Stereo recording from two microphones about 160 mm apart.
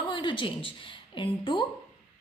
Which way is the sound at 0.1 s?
30° left (ahead or behind).